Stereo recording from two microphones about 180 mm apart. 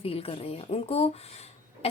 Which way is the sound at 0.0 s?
30° left (ahead or behind).